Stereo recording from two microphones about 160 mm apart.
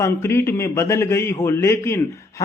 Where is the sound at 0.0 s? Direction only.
15° left (ahead or behind).